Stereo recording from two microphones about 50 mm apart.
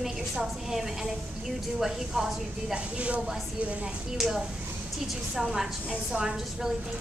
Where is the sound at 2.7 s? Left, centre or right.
Right.